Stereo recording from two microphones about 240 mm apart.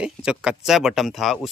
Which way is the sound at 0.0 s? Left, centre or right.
Centre.